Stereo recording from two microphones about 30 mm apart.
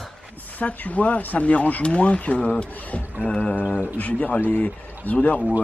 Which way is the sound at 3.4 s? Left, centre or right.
Left.